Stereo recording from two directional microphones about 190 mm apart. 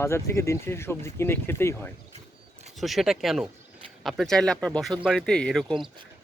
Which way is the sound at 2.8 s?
Centre (ahead or behind).